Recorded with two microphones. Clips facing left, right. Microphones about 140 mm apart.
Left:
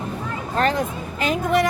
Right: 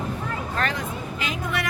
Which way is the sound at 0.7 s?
45° left (ahead or behind).